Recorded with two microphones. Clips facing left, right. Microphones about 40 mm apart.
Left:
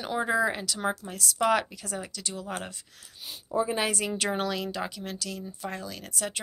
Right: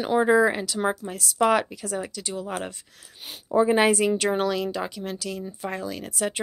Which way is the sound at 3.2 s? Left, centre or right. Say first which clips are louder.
Right 2 dB; right.